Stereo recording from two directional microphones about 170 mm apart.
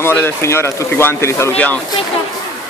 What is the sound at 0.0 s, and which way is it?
Speech, 15° left (ahead or behind).